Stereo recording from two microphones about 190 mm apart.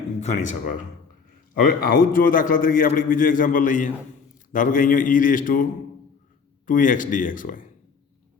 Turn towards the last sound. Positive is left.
turn(degrees=45)  # may be behind; listen again after turning